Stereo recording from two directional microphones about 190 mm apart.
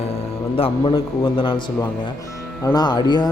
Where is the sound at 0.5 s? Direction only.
30° left (ahead or behind).